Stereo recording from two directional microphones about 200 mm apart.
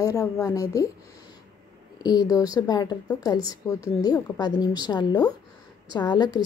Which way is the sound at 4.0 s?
20° left (ahead or behind).